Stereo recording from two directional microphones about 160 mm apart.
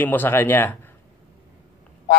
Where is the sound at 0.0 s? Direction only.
10° left (ahead or behind).